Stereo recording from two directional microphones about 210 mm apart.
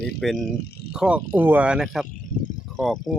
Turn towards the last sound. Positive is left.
turn(degrees=0)  # may be behind; listen again after turning